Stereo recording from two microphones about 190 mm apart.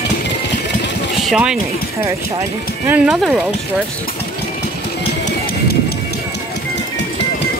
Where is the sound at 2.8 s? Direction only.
5° right (ahead or behind).